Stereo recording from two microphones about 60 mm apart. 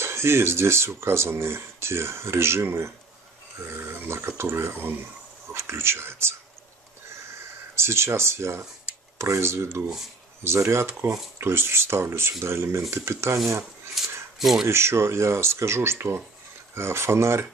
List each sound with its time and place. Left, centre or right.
0.0 s speech: right
7.7 s speech: right
13.9 s a sound: centre
14.7 s speech: right